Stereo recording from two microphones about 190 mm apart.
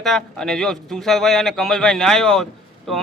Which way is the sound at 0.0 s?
Centre (ahead or behind).